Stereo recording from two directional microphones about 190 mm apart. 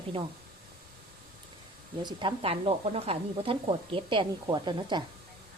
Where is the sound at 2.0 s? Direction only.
25° right (ahead or behind).